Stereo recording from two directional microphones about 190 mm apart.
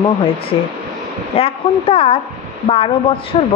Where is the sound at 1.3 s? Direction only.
30° left (ahead or behind).